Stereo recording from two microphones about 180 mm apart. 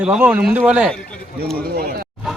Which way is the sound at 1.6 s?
55° right (ahead or behind).